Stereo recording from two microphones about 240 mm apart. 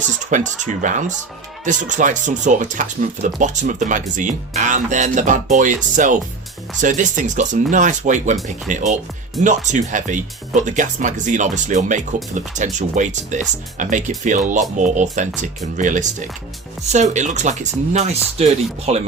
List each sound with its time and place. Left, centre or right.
0.3 s speech: right
9.4 s speech: centre
9.7 s speech: right